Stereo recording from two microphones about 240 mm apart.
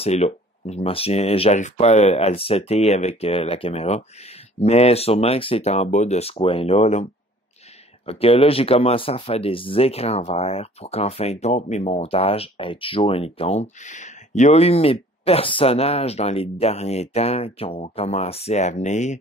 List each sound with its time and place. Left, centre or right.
0.0 s speech: left